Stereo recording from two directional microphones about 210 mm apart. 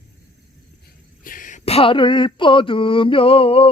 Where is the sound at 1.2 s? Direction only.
40° left (ahead or behind).